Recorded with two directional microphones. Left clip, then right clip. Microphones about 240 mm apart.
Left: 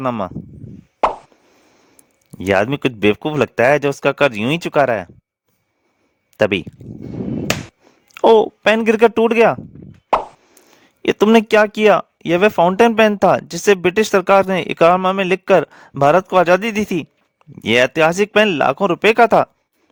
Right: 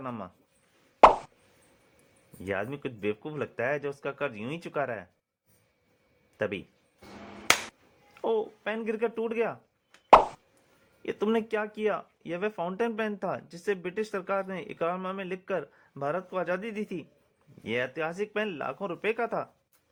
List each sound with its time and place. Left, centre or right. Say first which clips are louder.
0.0 s speech: left 18 dB; left
1.0 s plop: even; centre
2.4 s speech: left 17 dB; left
6.3 s speech: left 16 dB; left
8.1 s speech: left 18 dB; left
10.1 s plop: even; centre
11.0 s speech: left 16 dB; left